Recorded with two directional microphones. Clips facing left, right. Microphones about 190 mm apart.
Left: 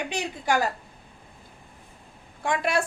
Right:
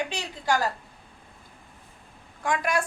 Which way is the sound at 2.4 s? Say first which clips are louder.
Left 1 dB; 25° left (ahead or behind).